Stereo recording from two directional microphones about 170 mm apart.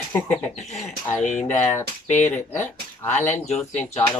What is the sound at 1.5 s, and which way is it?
Speech, 15° left (ahead or behind).